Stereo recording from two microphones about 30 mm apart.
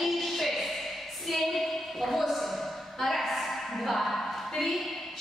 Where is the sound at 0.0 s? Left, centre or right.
Centre.